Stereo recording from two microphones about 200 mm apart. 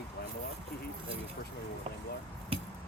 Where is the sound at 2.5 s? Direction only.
30° right (ahead or behind).